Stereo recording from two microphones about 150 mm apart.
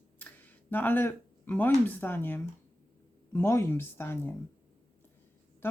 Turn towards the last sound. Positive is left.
turn(degrees=15)  # may be behind; listen again after turning